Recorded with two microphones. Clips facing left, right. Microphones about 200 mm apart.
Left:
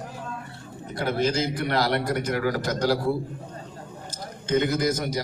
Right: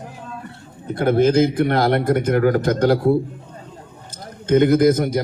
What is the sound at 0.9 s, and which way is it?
Speech, 55° right (ahead or behind).